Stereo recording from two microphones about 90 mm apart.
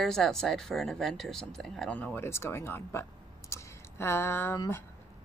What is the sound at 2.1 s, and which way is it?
Speech, 30° left (ahead or behind).